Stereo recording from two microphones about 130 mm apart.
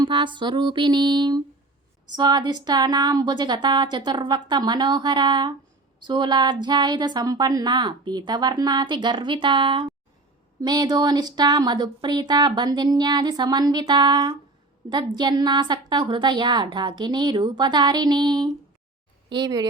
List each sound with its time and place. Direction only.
0.0 s speech: 35° right (ahead or behind)
10.6 s speech: 30° right (ahead or behind)